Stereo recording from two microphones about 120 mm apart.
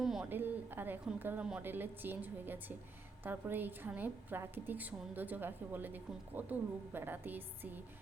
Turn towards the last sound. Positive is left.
turn(degrees=-15)  # may be behind; listen again after turning